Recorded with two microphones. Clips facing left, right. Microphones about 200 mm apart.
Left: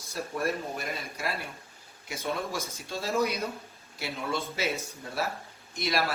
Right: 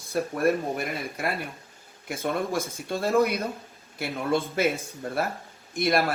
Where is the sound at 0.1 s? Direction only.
55° right (ahead or behind).